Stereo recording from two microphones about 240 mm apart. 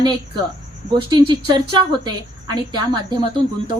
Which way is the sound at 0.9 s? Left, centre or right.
Centre.